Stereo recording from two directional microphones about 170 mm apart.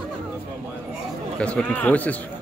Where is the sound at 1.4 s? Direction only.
5° left (ahead or behind).